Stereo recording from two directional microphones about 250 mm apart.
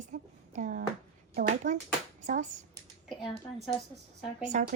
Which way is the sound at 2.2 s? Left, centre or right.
Right.